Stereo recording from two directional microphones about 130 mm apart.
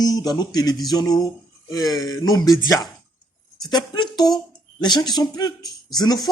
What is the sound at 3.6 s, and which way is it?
Speech, 35° left (ahead or behind).